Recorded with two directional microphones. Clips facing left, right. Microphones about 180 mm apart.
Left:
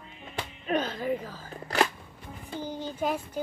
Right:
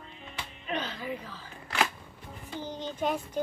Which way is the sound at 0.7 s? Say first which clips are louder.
Left 6 dB; 45° left (ahead or behind).